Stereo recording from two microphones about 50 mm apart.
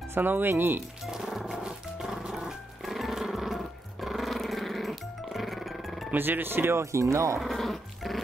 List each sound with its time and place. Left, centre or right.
0.1 s speech: right
1.0 s music: centre
6.1 s speech: right
6.8 s speech: right
7.3 s dog: centre